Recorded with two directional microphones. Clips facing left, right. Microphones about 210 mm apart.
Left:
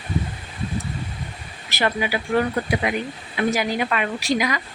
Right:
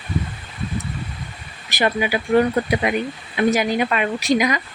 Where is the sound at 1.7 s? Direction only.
15° right (ahead or behind).